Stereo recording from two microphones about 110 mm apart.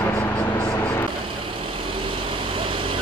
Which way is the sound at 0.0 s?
20° left (ahead or behind).